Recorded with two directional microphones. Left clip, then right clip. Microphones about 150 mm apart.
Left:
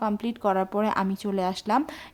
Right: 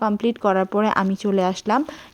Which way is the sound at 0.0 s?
25° right (ahead or behind).